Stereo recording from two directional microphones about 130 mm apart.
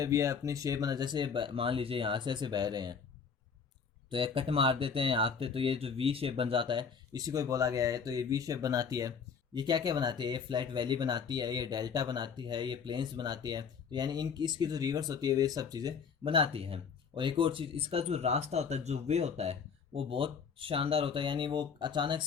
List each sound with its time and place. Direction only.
0.0 s speech: 25° right (ahead or behind)
4.1 s speech: 45° right (ahead or behind)
16.2 s speech: 45° right (ahead or behind)